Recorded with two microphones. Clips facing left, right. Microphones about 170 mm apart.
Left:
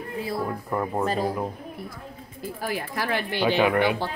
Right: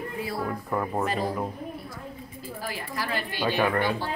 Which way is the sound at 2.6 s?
60° left (ahead or behind).